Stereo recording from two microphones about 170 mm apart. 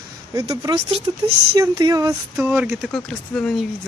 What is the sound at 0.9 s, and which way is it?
Speech, 35° right (ahead or behind).